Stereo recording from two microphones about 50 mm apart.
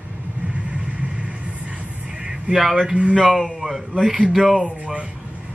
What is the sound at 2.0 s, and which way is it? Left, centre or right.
Music, centre.